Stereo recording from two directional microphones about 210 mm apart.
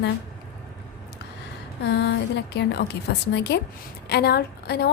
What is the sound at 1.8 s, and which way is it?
A woman's voice, 55° left (ahead or behind).